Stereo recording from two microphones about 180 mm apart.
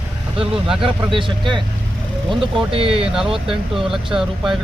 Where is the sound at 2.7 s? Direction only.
30° right (ahead or behind).